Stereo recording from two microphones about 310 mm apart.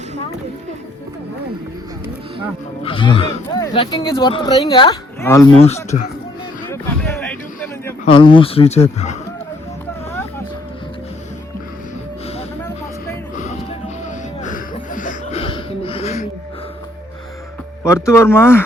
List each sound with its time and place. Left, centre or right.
2.8 s speech: centre
5.5 s speech: left
6.7 s a sound: centre
8.0 s speech: centre
12.3 s music: centre
17.8 s speech: centre